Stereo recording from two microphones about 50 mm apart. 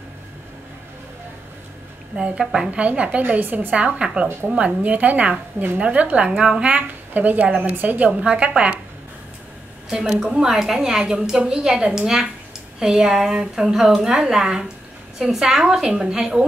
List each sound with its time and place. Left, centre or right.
2.1 s a woman's voice: centre
2.7 s a woman's voice: right
3.7 s a woman's voice: right
7.7 s a woman's voice: right
8.3 s a woman's voice: right
9.8 s a woman's voice: centre